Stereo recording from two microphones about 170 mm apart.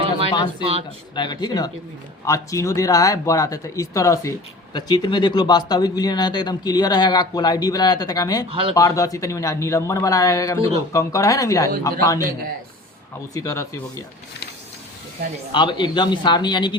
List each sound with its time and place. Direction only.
0.6 s speech: 35° right (ahead or behind)
1.1 s speech: 25° left (ahead or behind)
8.4 s speech: 35° right (ahead or behind)
8.7 s speech: 20° left (ahead or behind)
13.3 s speech: 20° left (ahead or behind)
15.2 s speech: 70° right (ahead or behind)
15.5 s speech: 25° left (ahead or behind)